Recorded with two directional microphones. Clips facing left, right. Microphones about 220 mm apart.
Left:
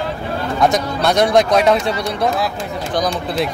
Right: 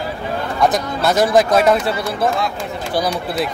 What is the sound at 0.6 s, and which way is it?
Speech, centre (ahead or behind).